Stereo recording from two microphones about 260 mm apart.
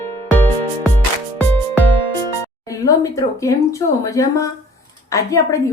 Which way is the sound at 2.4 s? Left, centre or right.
Centre.